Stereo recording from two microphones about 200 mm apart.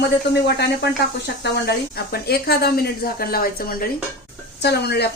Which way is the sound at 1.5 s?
55° left (ahead or behind).